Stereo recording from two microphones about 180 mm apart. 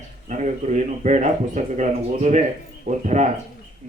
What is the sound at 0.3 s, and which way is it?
Speech, 40° right (ahead or behind).